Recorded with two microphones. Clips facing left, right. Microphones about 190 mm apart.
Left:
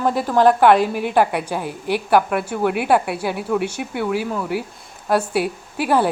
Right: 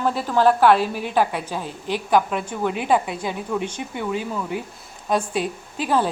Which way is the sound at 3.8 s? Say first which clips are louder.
Left 4 dB; 75° left (ahead or behind).